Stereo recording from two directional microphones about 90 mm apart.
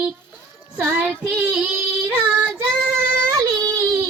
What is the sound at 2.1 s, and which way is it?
Child singing, 20° right (ahead or behind).